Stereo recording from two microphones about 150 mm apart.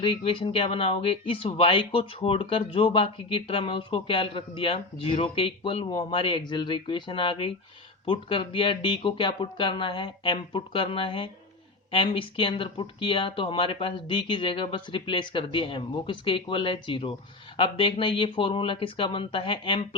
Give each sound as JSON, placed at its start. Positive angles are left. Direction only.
{"t": 0.0, "sound": "speech", "side_deg": 35}